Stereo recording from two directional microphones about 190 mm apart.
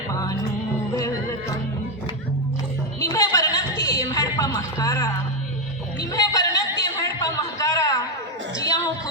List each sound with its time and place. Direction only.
0.1 s music: 20° left (ahead or behind)
3.0 s music: 15° left (ahead or behind)
6.0 s a sound: 20° left (ahead or behind)